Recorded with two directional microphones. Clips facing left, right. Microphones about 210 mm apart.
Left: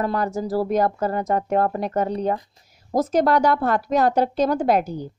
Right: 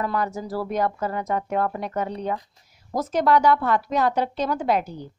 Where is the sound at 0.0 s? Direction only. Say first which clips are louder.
Left 3 dB; 40° left (ahead or behind).